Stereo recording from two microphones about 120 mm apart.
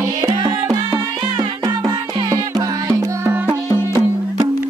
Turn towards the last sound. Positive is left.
turn(degrees=20)  # may be behind; listen again after turning